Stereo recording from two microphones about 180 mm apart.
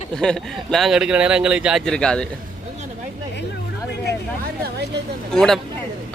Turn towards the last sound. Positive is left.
turn(degrees=5)  # may be behind; listen again after turning